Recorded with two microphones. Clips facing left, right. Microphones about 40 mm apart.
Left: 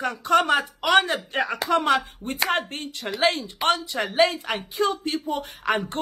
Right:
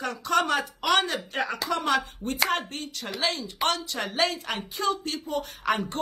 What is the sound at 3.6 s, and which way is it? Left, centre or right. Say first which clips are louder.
A woman's voice: left 4 dB; centre.